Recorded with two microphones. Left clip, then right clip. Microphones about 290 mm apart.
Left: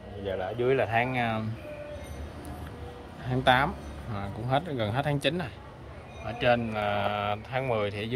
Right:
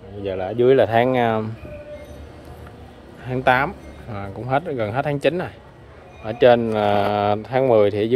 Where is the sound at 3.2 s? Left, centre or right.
Centre.